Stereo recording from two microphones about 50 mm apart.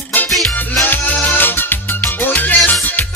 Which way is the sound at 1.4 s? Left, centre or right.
Left.